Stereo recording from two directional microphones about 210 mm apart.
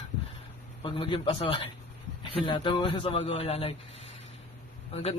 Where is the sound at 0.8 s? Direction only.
25° left (ahead or behind).